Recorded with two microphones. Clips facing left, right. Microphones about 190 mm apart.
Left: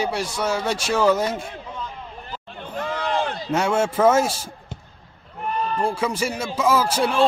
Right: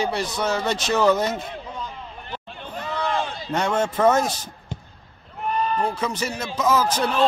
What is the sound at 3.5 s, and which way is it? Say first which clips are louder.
Speech: left 2 dB; 10° left (ahead or behind).